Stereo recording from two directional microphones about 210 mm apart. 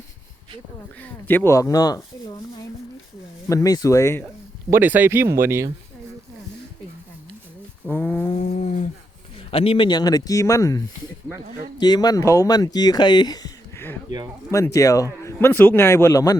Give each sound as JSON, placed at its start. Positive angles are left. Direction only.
{"t": 1.3, "sound": "a man's voice", "side_deg": 10}
{"t": 3.5, "sound": "a man's voice", "side_deg": 15}
{"t": 4.7, "sound": "speech", "side_deg": -10}
{"t": 7.9, "sound": "a man's voice", "side_deg": 10}
{"t": 8.4, "sound": "humming", "side_deg": 35}
{"t": 9.5, "sound": "a man's voice", "side_deg": 25}